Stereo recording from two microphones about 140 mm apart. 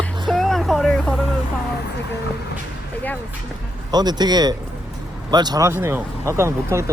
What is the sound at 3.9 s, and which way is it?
Speech, 30° right (ahead or behind).